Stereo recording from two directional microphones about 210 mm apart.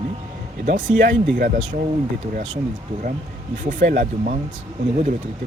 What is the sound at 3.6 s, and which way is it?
Speech, 45° right (ahead or behind).